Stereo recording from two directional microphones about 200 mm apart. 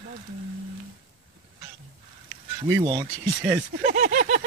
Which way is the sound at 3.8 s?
40° right (ahead or behind).